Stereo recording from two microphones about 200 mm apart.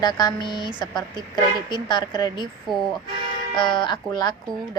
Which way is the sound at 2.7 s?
Centre (ahead or behind).